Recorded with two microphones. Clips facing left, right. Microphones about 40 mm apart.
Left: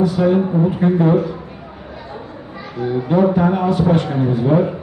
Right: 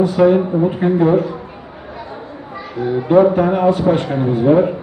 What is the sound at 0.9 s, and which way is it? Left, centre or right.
Speech, centre.